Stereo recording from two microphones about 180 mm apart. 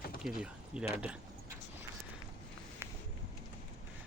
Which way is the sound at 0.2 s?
5° right (ahead or behind).